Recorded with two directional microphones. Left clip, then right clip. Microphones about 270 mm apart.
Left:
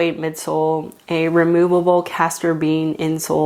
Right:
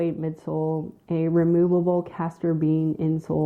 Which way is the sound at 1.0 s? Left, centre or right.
Centre.